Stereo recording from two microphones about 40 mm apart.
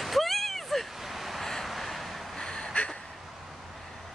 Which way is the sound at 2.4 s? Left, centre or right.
Centre.